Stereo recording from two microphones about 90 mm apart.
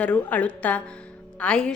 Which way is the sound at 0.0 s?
15° left (ahead or behind).